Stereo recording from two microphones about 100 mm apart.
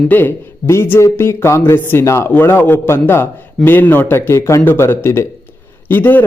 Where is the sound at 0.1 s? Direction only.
20° left (ahead or behind).